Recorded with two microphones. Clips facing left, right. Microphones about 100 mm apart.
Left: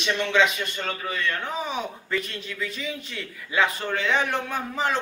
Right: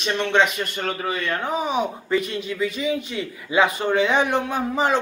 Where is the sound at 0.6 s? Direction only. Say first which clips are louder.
Right 4 dB; 50° right (ahead or behind).